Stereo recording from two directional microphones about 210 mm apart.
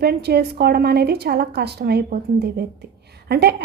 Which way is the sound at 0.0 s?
50° right (ahead or behind).